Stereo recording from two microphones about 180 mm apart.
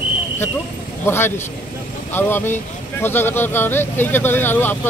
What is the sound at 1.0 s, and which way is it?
Speech, 15° left (ahead or behind).